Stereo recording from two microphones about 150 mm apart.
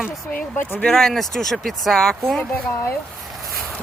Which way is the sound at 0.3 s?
65° left (ahead or behind).